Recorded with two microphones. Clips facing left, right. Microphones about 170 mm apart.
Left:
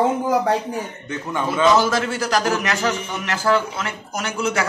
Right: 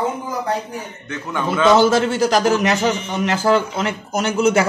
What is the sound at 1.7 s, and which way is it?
A man's voice, 25° right (ahead or behind).